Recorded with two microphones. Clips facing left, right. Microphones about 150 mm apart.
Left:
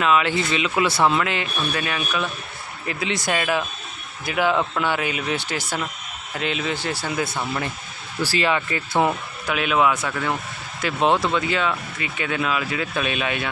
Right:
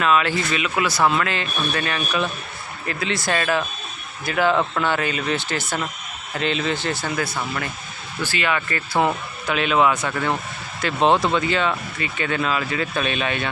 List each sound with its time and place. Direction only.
0.0 s speech: 15° left (ahead or behind)
8.2 s speech: 35° left (ahead or behind)
8.5 s speech: 20° left (ahead or behind)
9.5 s speech: 5° left (ahead or behind)